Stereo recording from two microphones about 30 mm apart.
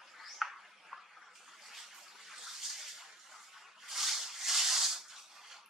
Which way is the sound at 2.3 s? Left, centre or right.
Centre.